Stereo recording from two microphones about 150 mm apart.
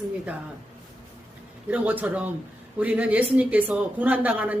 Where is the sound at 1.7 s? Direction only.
10° right (ahead or behind).